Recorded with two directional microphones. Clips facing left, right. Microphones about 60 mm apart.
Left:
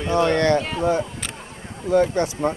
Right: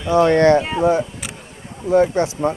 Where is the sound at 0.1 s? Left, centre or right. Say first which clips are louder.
Right 6 dB; right.